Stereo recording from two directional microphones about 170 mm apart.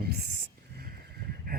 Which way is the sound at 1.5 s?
60° right (ahead or behind).